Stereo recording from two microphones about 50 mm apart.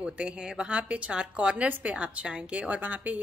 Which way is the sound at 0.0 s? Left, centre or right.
Centre.